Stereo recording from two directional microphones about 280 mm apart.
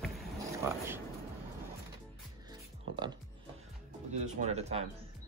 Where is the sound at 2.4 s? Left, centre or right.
Centre.